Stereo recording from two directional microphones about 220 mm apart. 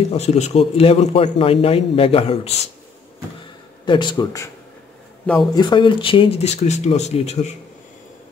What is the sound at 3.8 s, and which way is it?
Speech, 20° left (ahead or behind).